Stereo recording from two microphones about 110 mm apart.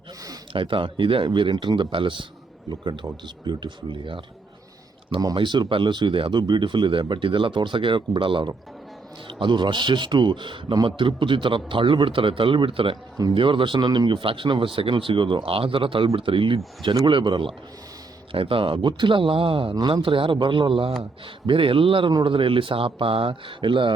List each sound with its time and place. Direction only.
0.5 s a man's voice: 50° right (ahead or behind)
5.2 s a man's voice: 45° right (ahead or behind)